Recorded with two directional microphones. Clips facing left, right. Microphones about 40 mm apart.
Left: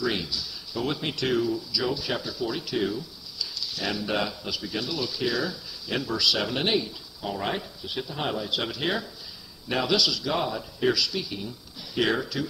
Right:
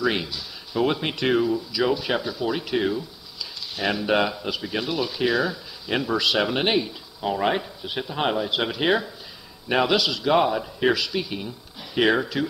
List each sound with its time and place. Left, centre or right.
0.0 s speech: right